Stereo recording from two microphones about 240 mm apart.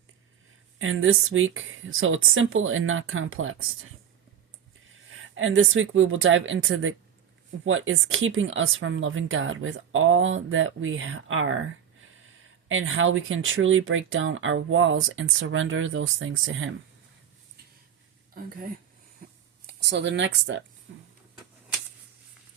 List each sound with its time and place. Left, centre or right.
0.8 s speech: right
5.3 s speech: right
18.3 s speech: right